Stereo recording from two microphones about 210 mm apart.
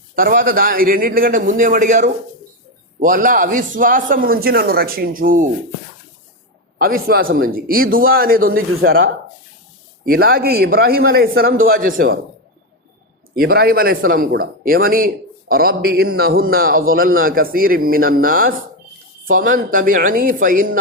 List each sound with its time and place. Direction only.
0.2 s a man's voice: 40° right (ahead or behind)
6.7 s speech: 45° right (ahead or behind)
13.3 s a man's voice: 45° right (ahead or behind)